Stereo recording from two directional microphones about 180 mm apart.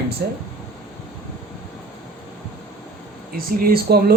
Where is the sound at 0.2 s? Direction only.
60° right (ahead or behind).